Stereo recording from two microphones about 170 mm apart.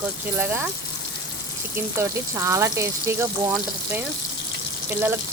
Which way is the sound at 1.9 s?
15° right (ahead or behind).